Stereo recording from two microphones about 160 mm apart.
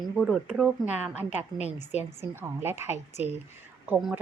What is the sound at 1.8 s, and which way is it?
Speech, 45° left (ahead or behind).